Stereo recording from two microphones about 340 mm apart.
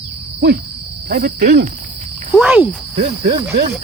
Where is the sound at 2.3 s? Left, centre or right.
Centre.